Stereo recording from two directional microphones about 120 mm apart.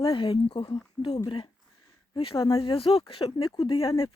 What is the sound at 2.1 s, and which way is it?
Speech, 45° left (ahead or behind).